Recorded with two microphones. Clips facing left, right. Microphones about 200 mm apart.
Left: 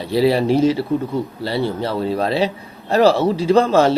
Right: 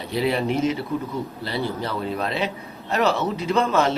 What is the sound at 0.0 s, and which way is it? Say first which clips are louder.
A man's voice: left 7 dB; 35° left (ahead or behind).